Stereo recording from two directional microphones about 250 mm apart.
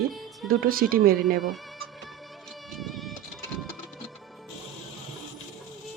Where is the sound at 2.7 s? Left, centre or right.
Centre.